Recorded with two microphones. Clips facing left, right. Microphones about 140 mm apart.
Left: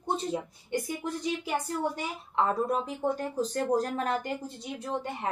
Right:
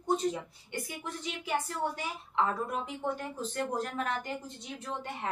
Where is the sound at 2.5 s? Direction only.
35° left (ahead or behind).